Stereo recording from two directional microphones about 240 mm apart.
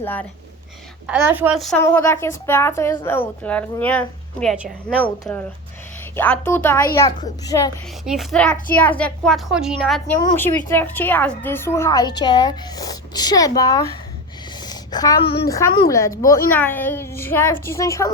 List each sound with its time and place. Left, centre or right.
0.0 s a woman's voice: centre
1.0 s a woman's voice: centre
8.0 s a woman's voice: centre
10.2 s a woman's voice: centre
15.5 s a woman's voice: centre